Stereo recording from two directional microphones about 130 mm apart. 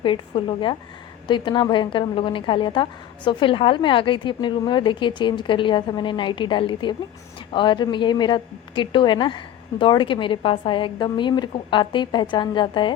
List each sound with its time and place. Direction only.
0.0 s a woman's voice: 40° left (ahead or behind)